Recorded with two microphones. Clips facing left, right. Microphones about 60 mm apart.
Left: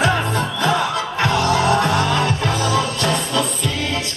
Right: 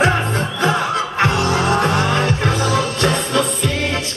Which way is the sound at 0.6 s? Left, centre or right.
Right.